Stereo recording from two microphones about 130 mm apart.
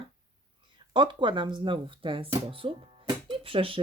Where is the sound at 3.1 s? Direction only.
40° right (ahead or behind).